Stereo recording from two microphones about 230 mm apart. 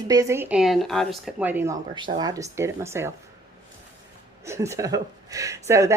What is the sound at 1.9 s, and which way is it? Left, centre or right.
Speech, centre.